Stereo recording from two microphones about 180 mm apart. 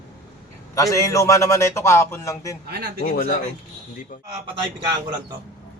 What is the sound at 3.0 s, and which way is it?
Speech, 55° left (ahead or behind).